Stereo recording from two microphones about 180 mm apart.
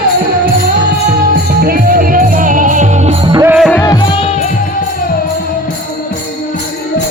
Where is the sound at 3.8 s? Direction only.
25° left (ahead or behind).